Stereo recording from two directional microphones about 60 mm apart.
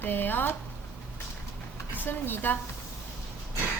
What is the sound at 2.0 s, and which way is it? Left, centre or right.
Speech, left.